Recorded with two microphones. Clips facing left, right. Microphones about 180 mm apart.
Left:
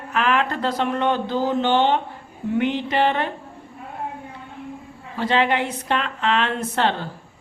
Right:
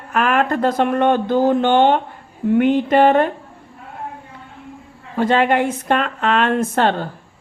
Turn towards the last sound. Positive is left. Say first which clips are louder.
# right 5 dB
turn(degrees=-50)  # may be behind; listen again after turning